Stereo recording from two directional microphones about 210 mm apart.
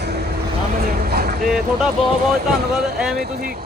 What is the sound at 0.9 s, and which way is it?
Vehicle, 45° right (ahead or behind).